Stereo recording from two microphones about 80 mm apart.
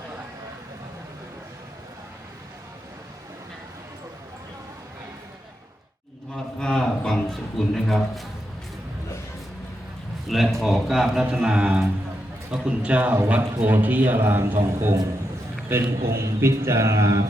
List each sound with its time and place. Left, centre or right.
6.3 s a sound: centre
10.2 s a man's voice: centre; by 14.5 s right
15.7 s a man's voice: right